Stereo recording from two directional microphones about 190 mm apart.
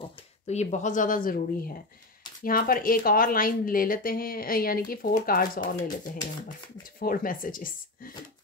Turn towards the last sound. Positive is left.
turn(degrees=45)  # may be behind; listen again after turning